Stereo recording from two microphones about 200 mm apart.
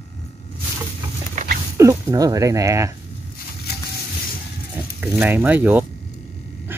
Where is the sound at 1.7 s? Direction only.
15° right (ahead or behind).